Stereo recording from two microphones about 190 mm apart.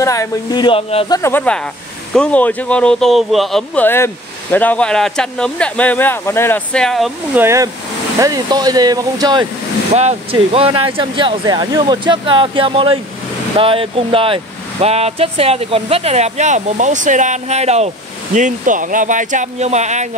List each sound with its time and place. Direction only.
0.0 s speech: 15° left (ahead or behind)
1.1 s speech: 10° left (ahead or behind)
7.3 s speech: 15° right (ahead or behind)
9.9 s speech: 30° right (ahead or behind)